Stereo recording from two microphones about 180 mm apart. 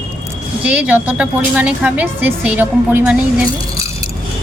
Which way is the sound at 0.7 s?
10° right (ahead or behind).